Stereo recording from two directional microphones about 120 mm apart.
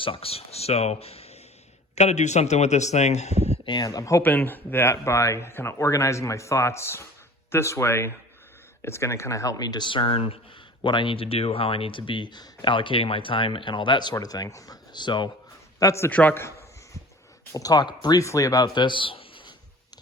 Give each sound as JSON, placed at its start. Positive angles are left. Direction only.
{"t": 0.0, "sound": "speech", "side_deg": 50}
{"t": 2.0, "sound": "a man's voice", "side_deg": 70}
{"t": 3.7, "sound": "speech", "side_deg": 35}
{"t": 4.2, "sound": "speech", "side_deg": 15}
{"t": 15.8, "sound": "speech", "side_deg": 25}
{"t": 16.0, "sound": "a sound", "side_deg": 15}
{"t": 17.5, "sound": "speech", "side_deg": 30}